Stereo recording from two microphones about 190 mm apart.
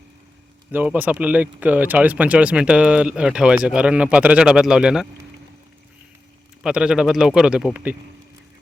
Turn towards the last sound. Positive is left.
turn(degrees=-5)  # may be behind; listen again after turning